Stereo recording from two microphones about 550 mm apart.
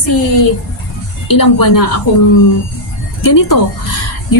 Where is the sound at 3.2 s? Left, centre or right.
Left.